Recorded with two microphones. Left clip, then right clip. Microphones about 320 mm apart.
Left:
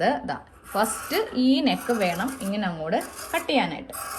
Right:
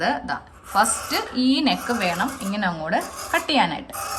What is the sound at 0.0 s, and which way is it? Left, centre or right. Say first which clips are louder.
A woman's voice: right 1 dB; centre.